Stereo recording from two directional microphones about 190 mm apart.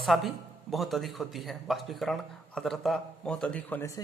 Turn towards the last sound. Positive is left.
turn(degrees=15)  # may be behind; listen again after turning